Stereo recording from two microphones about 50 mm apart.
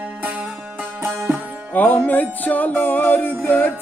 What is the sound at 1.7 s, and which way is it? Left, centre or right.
Music, left.